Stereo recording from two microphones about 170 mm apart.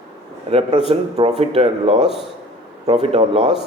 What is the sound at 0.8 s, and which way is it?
Speech, 35° right (ahead or behind).